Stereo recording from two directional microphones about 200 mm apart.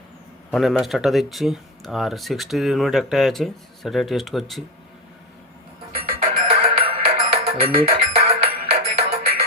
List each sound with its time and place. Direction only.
0.5 s speech: centre (ahead or behind)
6.1 s music: 30° right (ahead or behind)